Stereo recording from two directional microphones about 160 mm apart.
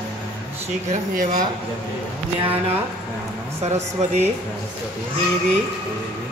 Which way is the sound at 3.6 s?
45° right (ahead or behind).